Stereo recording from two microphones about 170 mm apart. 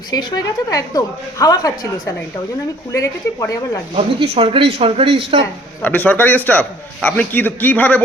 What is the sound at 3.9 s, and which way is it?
Speech, 35° right (ahead or behind).